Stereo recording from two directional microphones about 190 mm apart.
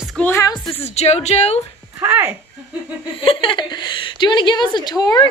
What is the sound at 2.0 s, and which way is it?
Speech, 10° right (ahead or behind).